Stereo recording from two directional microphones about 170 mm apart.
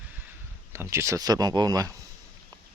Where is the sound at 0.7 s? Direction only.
15° right (ahead or behind).